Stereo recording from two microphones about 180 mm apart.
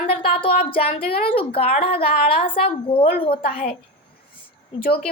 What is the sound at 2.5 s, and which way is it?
Speech, 30° left (ahead or behind).